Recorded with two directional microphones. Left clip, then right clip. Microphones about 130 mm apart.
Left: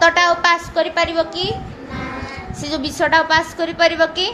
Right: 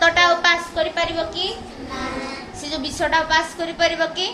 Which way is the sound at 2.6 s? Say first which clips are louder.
Left 4 dB; 65° left (ahead or behind).